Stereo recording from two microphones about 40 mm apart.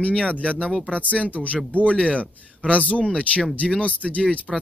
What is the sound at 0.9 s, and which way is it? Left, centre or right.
Speech, left.